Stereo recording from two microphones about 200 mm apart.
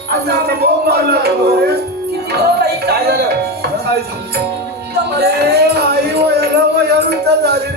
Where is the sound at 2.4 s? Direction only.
55° right (ahead or behind).